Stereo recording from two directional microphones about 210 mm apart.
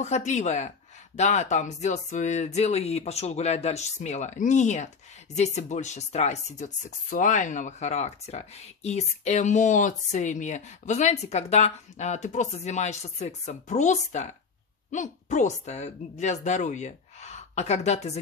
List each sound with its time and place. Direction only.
0.0 s speech: 35° left (ahead or behind)